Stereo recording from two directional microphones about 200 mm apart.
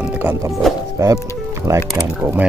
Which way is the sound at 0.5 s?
Centre (ahead or behind).